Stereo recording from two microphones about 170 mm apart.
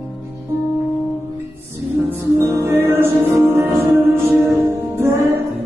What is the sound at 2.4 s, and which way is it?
Music, 15° right (ahead or behind).